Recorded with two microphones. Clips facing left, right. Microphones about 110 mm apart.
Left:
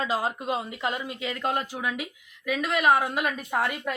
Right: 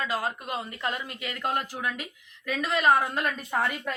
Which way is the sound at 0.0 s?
20° left (ahead or behind).